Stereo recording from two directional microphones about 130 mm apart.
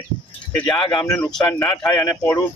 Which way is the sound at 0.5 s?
30° left (ahead or behind).